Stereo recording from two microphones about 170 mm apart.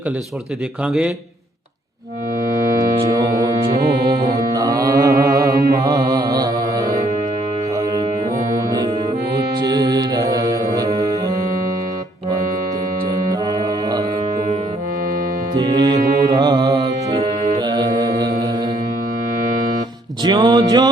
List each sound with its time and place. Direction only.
0.9 s a man's voice: 5° right (ahead or behind)
3.1 s music: 20° right (ahead or behind)
8.5 s music: 20° right (ahead or behind)
13.1 s music: 20° right (ahead or behind)
15.5 s music: 25° right (ahead or behind)
18.2 s mantra: 25° right (ahead or behind)
20.2 s music: 25° right (ahead or behind)